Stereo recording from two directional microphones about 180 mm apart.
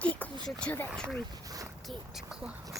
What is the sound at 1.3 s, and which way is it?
Speech, 20° right (ahead or behind).